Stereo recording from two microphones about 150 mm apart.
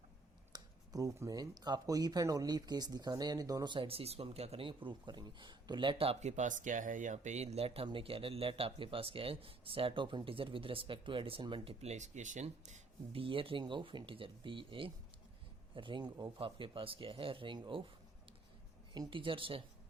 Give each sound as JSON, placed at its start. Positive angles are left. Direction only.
{"t": 0.5, "sound": "speech", "side_deg": -25}
{"t": 13.2, "sound": "speech", "side_deg": -35}
{"t": 18.9, "sound": "speech", "side_deg": -35}